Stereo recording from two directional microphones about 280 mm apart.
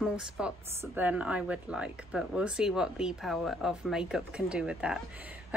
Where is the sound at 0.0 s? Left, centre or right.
Centre.